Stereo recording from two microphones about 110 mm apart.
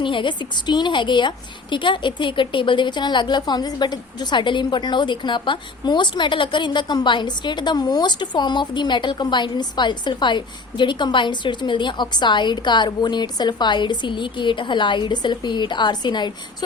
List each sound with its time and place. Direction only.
0.0 s a woman's voice: 50° left (ahead or behind)